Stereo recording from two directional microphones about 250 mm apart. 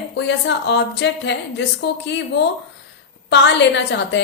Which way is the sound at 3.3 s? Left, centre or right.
Left.